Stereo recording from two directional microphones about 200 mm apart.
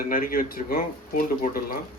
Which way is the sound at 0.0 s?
45° left (ahead or behind).